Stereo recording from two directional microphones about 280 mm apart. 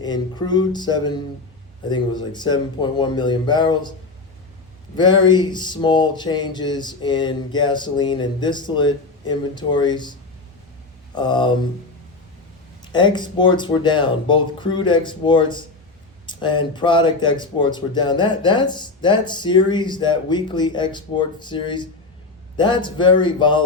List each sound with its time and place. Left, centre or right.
0.0 s speech: centre
4.9 s speech: centre
12.8 s speech: centre